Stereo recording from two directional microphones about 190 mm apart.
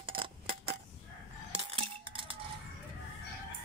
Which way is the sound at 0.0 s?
25° right (ahead or behind).